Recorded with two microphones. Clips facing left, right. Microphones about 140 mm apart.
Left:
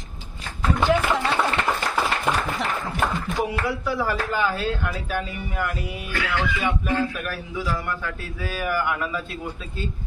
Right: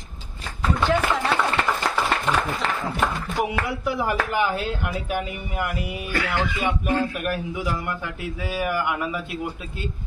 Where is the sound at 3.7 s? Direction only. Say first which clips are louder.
Even; 20° right (ahead or behind).